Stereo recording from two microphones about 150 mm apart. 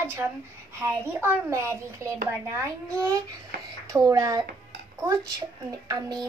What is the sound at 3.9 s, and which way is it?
A woman's voice, 20° right (ahead or behind).